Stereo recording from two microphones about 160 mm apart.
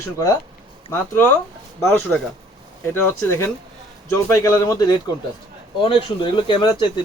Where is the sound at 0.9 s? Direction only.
15° left (ahead or behind).